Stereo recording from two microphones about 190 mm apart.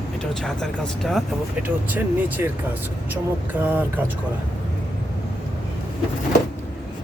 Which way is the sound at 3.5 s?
10° right (ahead or behind).